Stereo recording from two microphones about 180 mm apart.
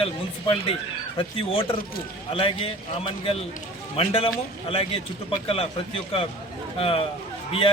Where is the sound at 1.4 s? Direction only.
30° left (ahead or behind).